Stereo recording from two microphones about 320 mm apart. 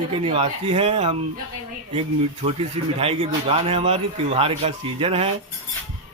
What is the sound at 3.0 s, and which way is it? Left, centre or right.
A man's voice, centre.